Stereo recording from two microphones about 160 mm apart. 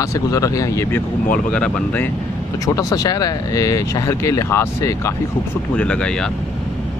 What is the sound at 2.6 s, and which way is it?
Speech, 20° left (ahead or behind).